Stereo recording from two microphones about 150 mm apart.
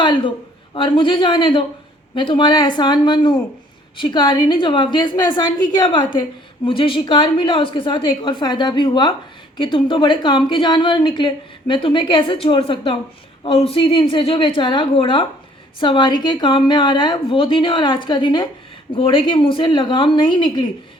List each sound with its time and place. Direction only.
0.0 s a woman's voice: 30° left (ahead or behind)